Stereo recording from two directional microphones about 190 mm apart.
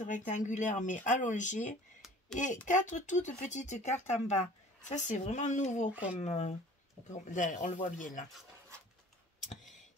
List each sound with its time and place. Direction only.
0.0 s speech: 40° left (ahead or behind)